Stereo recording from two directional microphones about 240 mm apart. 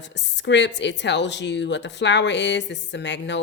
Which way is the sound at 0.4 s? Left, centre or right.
Left.